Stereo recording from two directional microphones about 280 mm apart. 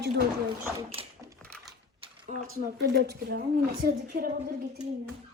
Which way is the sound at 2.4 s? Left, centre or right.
Right.